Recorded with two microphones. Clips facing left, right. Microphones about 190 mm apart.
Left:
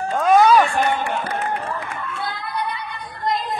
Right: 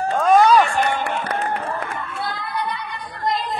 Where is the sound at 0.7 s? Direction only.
65° right (ahead or behind).